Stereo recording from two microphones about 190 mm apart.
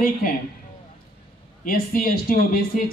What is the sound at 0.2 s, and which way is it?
Speech, 50° left (ahead or behind).